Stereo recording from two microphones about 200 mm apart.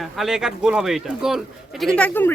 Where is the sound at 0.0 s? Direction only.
Centre (ahead or behind).